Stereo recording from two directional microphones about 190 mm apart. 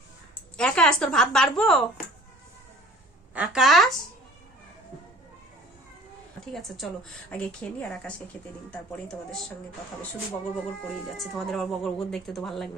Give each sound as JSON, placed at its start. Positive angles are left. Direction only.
{"t": 0.5, "sound": "speech", "side_deg": 5}
{"t": 3.3, "sound": "speech", "side_deg": -5}
{"t": 6.4, "sound": "a woman's voice", "side_deg": 0}
{"t": 11.2, "sound": "speech", "side_deg": 0}